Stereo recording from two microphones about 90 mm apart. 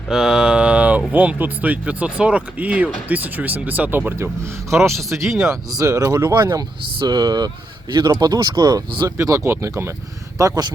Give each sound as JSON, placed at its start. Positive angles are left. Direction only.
{"t": 0.1, "sound": "mantra", "side_deg": -5}
{"t": 1.1, "sound": "speech", "side_deg": -20}
{"t": 4.7, "sound": "speech", "side_deg": -30}
{"t": 6.3, "sound": "speech", "side_deg": -45}
{"t": 9.0, "sound": "speech", "side_deg": -40}
{"t": 10.3, "sound": "a man's voice", "side_deg": -45}